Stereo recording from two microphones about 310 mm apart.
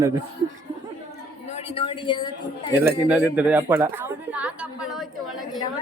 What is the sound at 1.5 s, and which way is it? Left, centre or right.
Speech, centre.